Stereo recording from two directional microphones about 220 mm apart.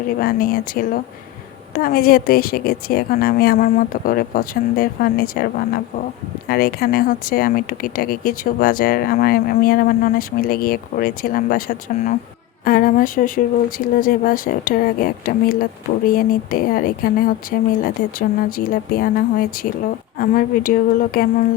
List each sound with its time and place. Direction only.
0.2 s a woman's voice: 40° left (ahead or behind)